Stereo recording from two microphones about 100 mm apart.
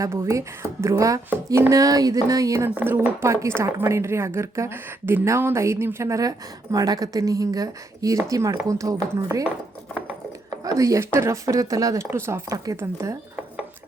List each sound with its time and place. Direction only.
0.0 s a woman's voice: 35° right (ahead or behind)
2.6 s a woman's voice: 20° right (ahead or behind); by 9.4 s 35° right (ahead or behind)
10.6 s a woman's voice: 35° right (ahead or behind)